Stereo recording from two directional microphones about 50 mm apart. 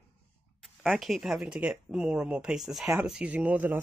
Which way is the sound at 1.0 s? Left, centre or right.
Centre.